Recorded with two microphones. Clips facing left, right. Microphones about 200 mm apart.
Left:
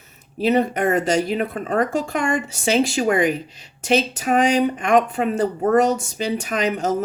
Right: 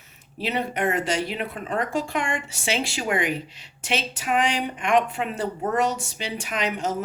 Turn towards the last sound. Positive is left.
turn(degrees=40)  # may be behind; listen again after turning